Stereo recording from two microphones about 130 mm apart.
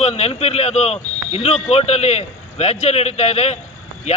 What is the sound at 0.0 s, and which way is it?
A man's voice, 55° left (ahead or behind).